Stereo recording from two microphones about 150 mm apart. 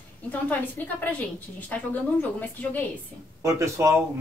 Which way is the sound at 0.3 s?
10° left (ahead or behind).